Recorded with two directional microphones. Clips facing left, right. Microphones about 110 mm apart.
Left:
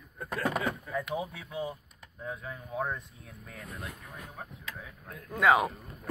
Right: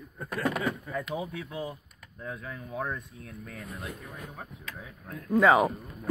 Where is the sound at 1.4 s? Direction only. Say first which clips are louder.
Even; 20° left (ahead or behind).